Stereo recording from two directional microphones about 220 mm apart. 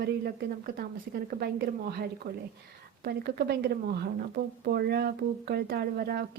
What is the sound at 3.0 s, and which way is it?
Speech, 45° right (ahead or behind).